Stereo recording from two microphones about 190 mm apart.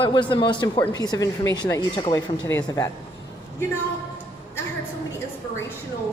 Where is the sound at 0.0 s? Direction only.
25° left (ahead or behind).